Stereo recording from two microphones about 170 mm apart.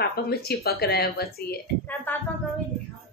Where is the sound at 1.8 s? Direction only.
10° left (ahead or behind).